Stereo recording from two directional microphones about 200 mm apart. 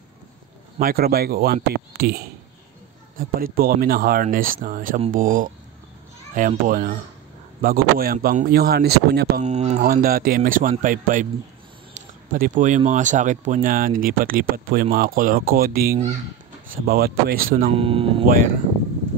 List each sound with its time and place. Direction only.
0.7 s speech: 45° right (ahead or behind)
9.4 s speech: 35° right (ahead or behind)
10.0 s speech: 45° right (ahead or behind)
17.7 s speech: 25° right (ahead or behind)